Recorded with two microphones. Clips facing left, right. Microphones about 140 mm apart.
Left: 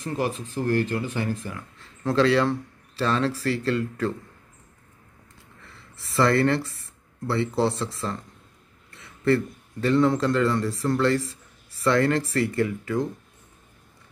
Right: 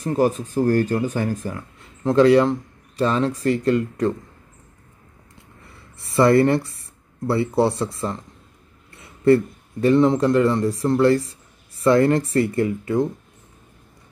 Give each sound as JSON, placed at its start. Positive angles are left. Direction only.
{"t": 0.0, "sound": "speech", "side_deg": -40}
{"t": 2.0, "sound": "speech", "side_deg": -20}
{"t": 6.1, "sound": "speech", "side_deg": -25}
{"t": 8.9, "sound": "a sound", "side_deg": -25}
{"t": 9.8, "sound": "speech", "side_deg": -20}